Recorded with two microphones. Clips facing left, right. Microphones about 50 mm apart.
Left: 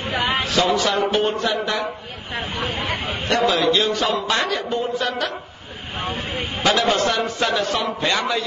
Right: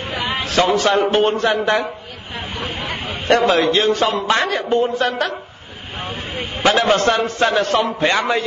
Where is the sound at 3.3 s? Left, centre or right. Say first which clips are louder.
Right 4 dB; right.